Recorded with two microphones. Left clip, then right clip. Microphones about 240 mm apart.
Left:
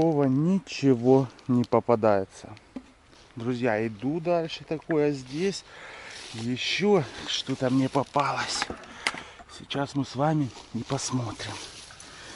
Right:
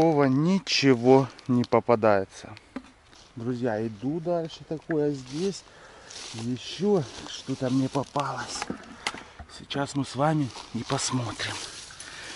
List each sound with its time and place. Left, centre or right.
0.1 s speech: centre
1.0 s speech: centre
3.3 s speech: centre